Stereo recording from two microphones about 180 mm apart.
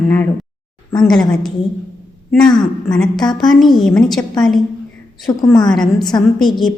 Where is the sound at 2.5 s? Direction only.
25° left (ahead or behind).